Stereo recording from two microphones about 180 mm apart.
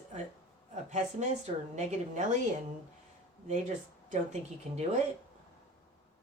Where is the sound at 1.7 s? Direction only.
40° right (ahead or behind).